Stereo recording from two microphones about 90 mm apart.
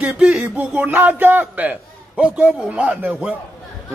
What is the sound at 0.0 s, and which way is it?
A man's voice, 10° right (ahead or behind).